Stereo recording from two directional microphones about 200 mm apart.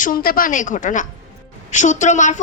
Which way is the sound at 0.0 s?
45° left (ahead or behind).